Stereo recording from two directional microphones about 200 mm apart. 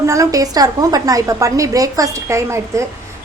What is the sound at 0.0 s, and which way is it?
A woman's voice, 15° right (ahead or behind).